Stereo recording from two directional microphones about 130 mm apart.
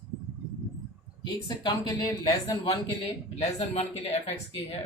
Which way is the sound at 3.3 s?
55° left (ahead or behind).